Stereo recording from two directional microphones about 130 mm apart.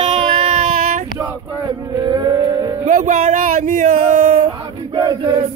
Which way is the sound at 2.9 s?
70° right (ahead or behind).